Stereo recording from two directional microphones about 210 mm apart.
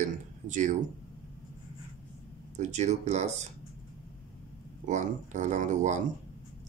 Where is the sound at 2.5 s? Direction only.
35° right (ahead or behind).